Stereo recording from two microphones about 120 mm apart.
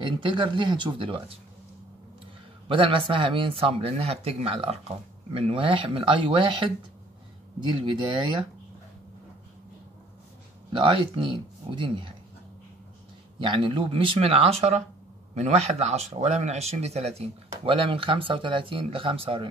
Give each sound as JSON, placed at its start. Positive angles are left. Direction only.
{"t": 0.0, "sound": "speech", "side_deg": -40}
{"t": 2.7, "sound": "speech", "side_deg": -45}
{"t": 10.7, "sound": "speech", "side_deg": -45}
{"t": 13.4, "sound": "speech", "side_deg": -45}